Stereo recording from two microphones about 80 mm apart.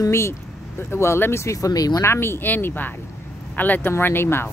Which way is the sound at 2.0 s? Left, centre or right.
Left.